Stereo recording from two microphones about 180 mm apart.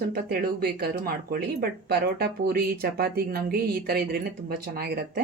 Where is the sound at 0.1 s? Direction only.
60° right (ahead or behind).